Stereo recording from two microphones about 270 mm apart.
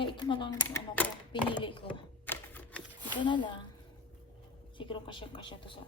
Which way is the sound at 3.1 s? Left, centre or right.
Centre.